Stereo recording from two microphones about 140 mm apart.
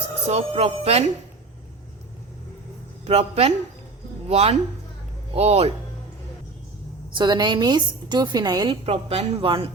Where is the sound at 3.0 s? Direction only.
50° right (ahead or behind).